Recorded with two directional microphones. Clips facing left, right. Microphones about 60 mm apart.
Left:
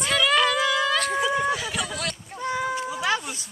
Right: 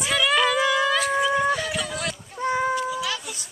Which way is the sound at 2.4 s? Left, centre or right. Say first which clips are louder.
Right 4 dB; right.